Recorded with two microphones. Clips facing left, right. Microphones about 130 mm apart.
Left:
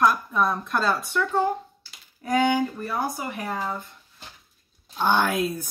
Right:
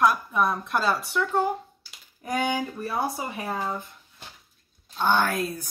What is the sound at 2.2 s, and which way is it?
Speech, 10° right (ahead or behind).